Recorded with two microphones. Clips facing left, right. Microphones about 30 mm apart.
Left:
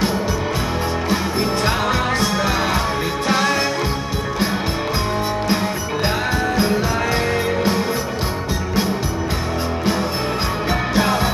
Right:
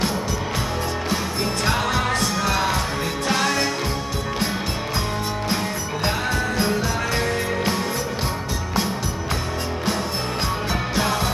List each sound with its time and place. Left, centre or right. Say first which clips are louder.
1.1 s music: left 5 dB; centre
5.5 s music: left 4 dB; centre
10.7 s music: left 6 dB; centre